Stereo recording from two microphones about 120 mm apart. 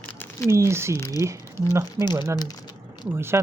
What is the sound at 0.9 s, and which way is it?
Speech, 25° left (ahead or behind).